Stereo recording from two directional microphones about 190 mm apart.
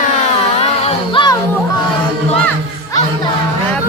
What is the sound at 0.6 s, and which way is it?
Music, 30° left (ahead or behind).